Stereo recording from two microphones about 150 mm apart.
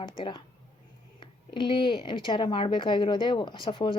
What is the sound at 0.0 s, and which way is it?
A woman's voice, 35° left (ahead or behind).